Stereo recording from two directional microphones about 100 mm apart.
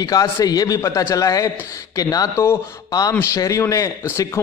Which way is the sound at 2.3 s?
25° left (ahead or behind).